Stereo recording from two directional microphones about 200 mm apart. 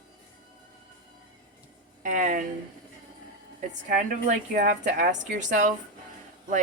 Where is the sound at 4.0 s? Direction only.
40° right (ahead or behind).